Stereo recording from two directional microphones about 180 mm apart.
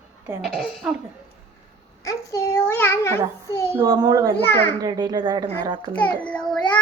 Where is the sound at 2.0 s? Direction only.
20° left (ahead or behind).